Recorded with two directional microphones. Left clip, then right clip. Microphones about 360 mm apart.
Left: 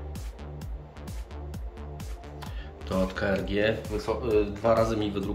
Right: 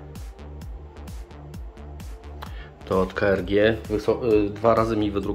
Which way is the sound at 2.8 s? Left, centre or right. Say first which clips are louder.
Right 6 dB; centre.